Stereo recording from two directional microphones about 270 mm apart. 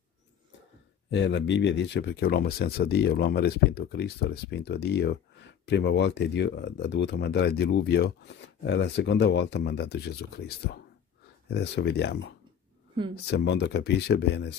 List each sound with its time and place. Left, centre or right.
1.1 s speech: left